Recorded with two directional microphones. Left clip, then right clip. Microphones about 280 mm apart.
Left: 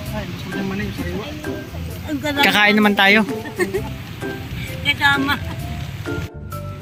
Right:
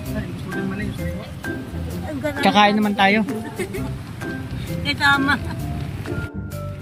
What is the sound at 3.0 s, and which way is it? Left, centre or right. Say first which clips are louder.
Speech: left 2 dB; centre.